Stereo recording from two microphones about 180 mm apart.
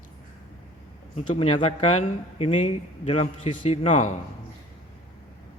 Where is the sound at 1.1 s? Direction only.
35° left (ahead or behind).